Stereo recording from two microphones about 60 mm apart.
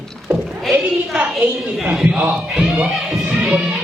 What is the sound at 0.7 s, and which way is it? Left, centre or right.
Speech, right.